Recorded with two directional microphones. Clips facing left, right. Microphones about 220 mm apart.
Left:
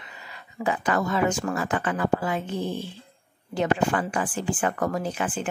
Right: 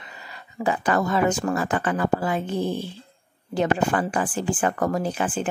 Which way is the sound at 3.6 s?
35° right (ahead or behind).